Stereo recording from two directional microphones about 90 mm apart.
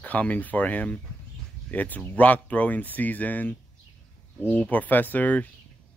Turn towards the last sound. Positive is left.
turn(degrees=15)  # may be behind; listen again after turning